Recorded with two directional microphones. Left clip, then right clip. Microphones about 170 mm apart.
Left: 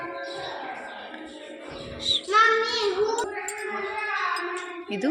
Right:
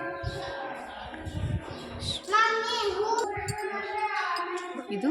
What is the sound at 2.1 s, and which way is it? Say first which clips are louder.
Child singing: left 10 dB; 40° right (ahead or behind).